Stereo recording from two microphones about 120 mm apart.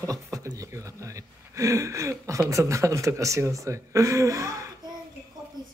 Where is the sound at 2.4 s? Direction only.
25° right (ahead or behind).